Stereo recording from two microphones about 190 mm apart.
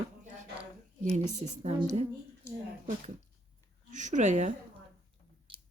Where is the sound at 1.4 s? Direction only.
35° right (ahead or behind).